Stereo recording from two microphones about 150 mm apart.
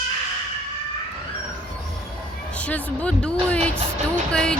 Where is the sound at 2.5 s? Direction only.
10° left (ahead or behind).